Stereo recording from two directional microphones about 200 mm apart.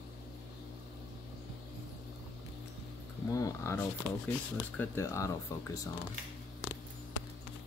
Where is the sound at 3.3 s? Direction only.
15° left (ahead or behind).